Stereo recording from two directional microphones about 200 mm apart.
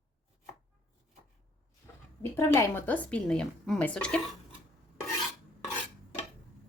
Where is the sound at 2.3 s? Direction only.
15° left (ahead or behind).